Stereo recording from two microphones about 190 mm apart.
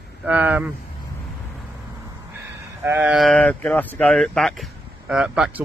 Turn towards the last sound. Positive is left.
turn(degrees=-5)  # may be behind; listen again after turning